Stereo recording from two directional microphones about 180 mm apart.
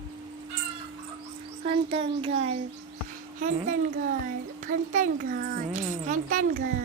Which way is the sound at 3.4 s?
45° right (ahead or behind).